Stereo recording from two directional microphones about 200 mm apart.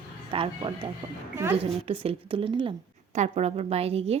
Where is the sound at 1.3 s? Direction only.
10° right (ahead or behind).